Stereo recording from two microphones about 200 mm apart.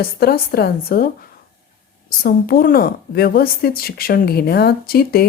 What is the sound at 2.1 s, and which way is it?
A woman's voice, 45° left (ahead or behind).